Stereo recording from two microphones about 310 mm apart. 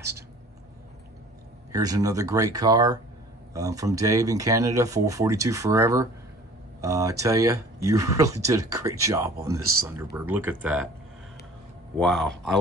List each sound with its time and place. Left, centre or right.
1.7 s speech: centre
9.6 s speech: right
9.8 s speech: centre
12.0 s speech: centre